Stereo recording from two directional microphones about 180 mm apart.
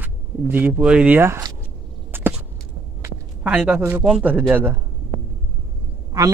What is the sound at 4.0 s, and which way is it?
Speech, 5° right (ahead or behind).